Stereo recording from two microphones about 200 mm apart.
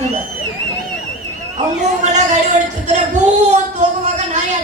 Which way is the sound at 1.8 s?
35° right (ahead or behind).